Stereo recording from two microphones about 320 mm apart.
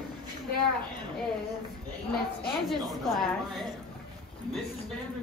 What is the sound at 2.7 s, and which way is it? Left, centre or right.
Child singing, centre.